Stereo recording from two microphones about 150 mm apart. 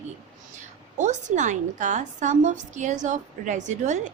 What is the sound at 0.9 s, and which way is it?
A woman's voice, 55° right (ahead or behind).